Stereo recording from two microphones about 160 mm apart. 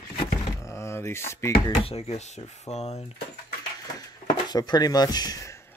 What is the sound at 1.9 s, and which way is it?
Speech, 40° left (ahead or behind).